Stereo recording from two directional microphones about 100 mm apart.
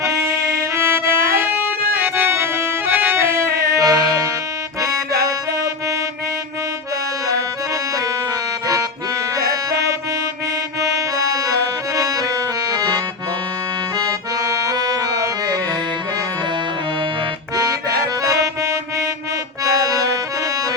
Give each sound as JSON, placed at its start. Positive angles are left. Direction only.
{"t": 0.0, "sound": "music", "side_deg": -30}
{"t": 7.3, "sound": "accordion", "side_deg": -35}
{"t": 9.3, "sound": "music", "side_deg": -35}
{"t": 10.8, "sound": "accordion", "side_deg": -35}
{"t": 17.5, "sound": "music", "side_deg": -35}
{"t": 19.6, "sound": "accordion", "side_deg": -35}